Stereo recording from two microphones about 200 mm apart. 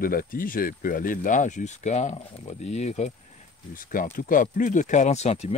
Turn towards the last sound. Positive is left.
turn(degrees=35)  # may be behind; listen again after turning